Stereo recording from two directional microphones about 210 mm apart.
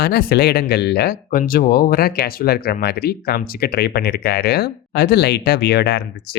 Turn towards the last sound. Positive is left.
turn(degrees=50)  # may be behind; listen again after turning